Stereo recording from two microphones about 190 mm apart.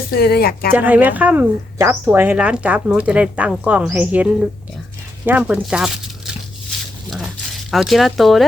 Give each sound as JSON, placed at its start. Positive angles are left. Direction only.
{"t": 0.1, "sound": "speech", "side_deg": 55}
{"t": 0.7, "sound": "speech", "side_deg": -10}
{"t": 7.7, "sound": "speech", "side_deg": 0}